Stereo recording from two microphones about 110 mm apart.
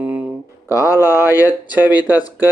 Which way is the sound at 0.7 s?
30° left (ahead or behind).